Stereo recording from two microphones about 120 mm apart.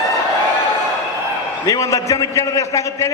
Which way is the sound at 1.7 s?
25° left (ahead or behind).